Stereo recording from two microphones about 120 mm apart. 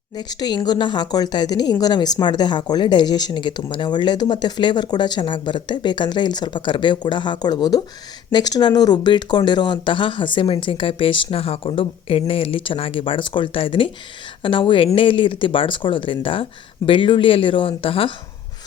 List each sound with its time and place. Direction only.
0.2 s speech: 35° left (ahead or behind)